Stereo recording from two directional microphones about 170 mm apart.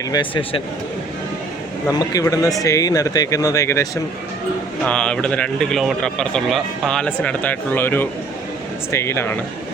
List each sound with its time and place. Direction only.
0.1 s speech: 30° left (ahead or behind)
1.9 s speech: 20° left (ahead or behind)
4.9 s a man's voice: 5° left (ahead or behind)